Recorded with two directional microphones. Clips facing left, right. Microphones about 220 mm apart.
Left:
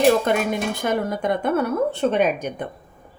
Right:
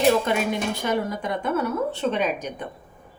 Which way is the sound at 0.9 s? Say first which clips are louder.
Left 5 dB; 55° left (ahead or behind).